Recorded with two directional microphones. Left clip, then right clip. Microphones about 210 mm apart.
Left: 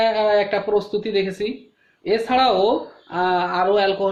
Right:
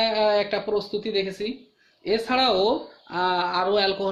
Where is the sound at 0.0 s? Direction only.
30° right (ahead or behind); by 1.5 s 10° right (ahead or behind).